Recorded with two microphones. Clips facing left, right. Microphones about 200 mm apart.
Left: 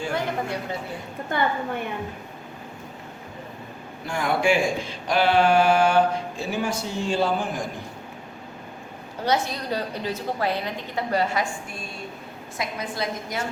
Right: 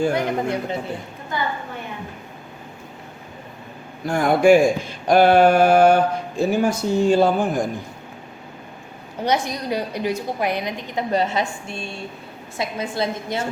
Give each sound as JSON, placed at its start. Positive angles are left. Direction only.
{"t": 0.1, "sound": "a woman's voice", "side_deg": -20}
{"t": 4.0, "sound": "speech", "side_deg": -45}
{"t": 9.2, "sound": "a woman's voice", "side_deg": -15}